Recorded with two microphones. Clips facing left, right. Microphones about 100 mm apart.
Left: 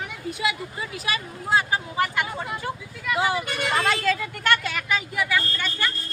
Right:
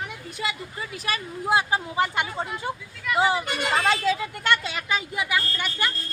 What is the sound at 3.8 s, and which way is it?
A woman's voice, 20° right (ahead or behind).